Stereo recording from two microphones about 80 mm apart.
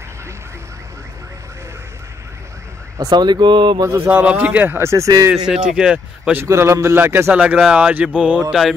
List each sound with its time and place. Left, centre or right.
3.1 s speech: right
3.8 s a man's voice: right
4.1 s a man's voice: centre
4.7 s a man's voice: right
5.5 s a sound: centre
6.4 s a man's voice: right
7.3 s a man's voice: centre
7.7 s a sound: centre